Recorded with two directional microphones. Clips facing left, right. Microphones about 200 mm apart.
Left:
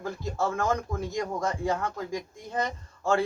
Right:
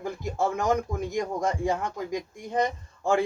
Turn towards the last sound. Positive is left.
turn(degrees=-15)  # may be behind; listen again after turning